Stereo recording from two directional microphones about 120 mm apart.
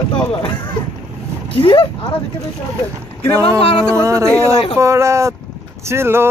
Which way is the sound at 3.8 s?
25° right (ahead or behind).